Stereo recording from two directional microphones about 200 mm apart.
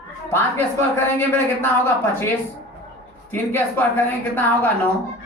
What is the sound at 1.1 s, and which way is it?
Speech, 10° left (ahead or behind).